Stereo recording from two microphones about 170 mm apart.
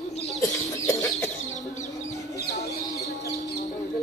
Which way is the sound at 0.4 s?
20° left (ahead or behind).